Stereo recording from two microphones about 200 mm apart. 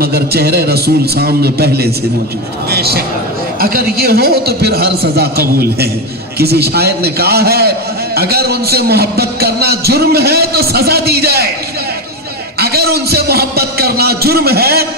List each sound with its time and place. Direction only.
0.0 s a man's voice: 50° right (ahead or behind)
6.3 s a man's voice: 50° right (ahead or behind)
12.5 s a man's voice: 50° right (ahead or behind)